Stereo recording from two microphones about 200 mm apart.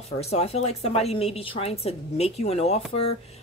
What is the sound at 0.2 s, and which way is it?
A woman's voice, 30° left (ahead or behind).